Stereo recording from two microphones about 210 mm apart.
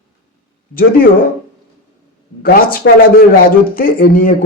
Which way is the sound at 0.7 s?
45° left (ahead or behind).